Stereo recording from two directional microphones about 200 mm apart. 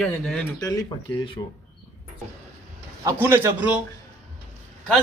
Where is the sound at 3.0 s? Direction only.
10° right (ahead or behind).